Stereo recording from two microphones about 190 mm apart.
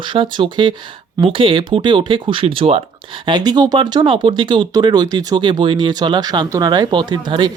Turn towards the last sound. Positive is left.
turn(degrees=-25)  # may be behind; listen again after turning